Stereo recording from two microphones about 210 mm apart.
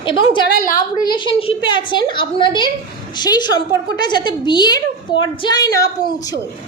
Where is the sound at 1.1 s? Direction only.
25° left (ahead or behind).